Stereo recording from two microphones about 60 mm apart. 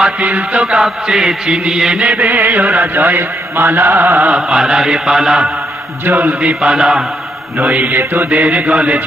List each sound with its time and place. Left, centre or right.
0.0 s mantra: right
2.0 s mantra: right
4.3 s mantra: centre
6.1 s mantra: right; by 7.0 s centre
7.6 s mantra: right
8.6 s mantra: centre